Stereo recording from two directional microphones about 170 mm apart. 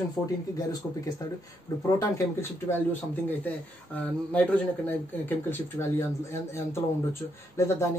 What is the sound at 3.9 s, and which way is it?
Speech, 10° left (ahead or behind).